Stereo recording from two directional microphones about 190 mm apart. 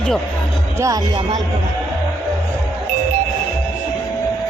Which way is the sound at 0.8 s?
20° right (ahead or behind).